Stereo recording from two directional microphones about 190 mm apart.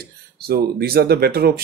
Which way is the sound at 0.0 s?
55° right (ahead or behind).